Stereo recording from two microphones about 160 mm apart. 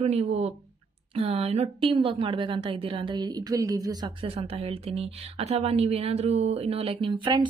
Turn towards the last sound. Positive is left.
turn(degrees=-30)  # may be behind; listen again after turning